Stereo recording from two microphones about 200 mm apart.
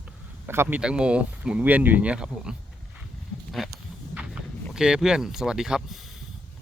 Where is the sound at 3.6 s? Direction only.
Centre (ahead or behind).